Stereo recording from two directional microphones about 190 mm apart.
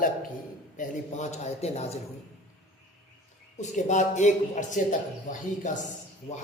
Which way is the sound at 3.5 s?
40° left (ahead or behind).